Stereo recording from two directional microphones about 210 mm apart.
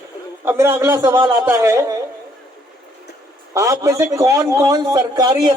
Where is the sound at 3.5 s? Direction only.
15° right (ahead or behind).